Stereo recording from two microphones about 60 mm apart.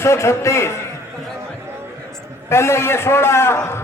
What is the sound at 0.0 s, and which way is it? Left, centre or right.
Speech, left.